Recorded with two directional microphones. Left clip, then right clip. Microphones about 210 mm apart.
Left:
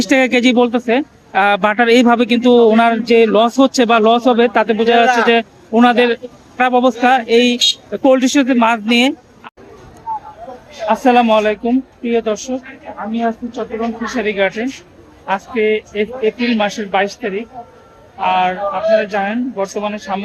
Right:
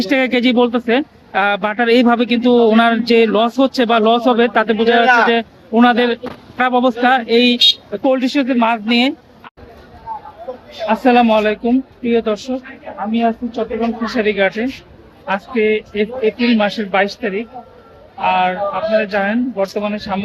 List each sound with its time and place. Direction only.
0.0 s speech: 20° left (ahead or behind)
8.0 s speech: 25° left (ahead or behind)
10.8 s speech: 15° left (ahead or behind)
14.1 s speech: 5° left (ahead or behind)